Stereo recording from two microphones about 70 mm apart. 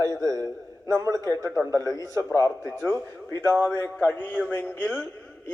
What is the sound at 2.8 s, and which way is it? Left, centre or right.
A man's voice, left.